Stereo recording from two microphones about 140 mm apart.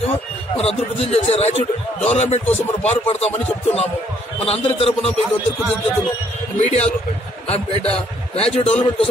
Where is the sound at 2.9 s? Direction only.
50° left (ahead or behind).